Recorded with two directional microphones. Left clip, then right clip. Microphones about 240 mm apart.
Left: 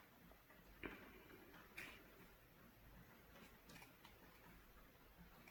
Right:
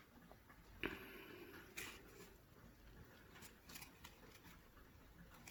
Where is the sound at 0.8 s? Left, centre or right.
Right.